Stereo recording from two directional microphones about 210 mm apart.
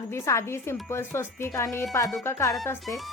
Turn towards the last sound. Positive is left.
turn(degrees=0)  # may be behind; listen again after turning